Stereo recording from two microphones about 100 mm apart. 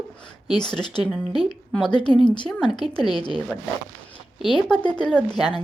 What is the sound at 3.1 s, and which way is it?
Speech, 50° left (ahead or behind).